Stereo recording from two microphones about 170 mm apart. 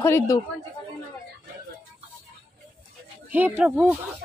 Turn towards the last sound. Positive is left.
turn(degrees=-10)  # may be behind; listen again after turning